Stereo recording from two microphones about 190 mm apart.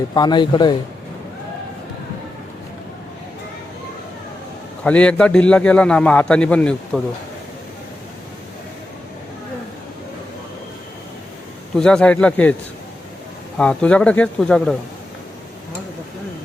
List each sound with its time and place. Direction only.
0.1 s speech: 20° left (ahead or behind)
4.8 s a man's voice: 5° left (ahead or behind)
11.8 s a man's voice: 5° left (ahead or behind)
13.6 s a man's voice: 5° left (ahead or behind)